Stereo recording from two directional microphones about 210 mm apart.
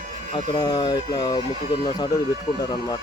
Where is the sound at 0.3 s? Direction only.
25° left (ahead or behind).